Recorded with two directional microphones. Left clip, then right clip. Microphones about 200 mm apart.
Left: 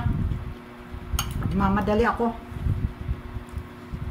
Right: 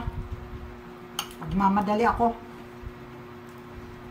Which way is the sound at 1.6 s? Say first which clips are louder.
Even; 15° right (ahead or behind).